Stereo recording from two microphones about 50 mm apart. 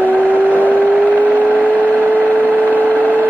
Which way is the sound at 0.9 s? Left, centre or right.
Right.